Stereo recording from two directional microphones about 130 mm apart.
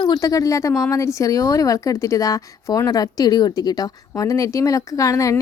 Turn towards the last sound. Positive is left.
turn(degrees=25)  # may be behind; listen again after turning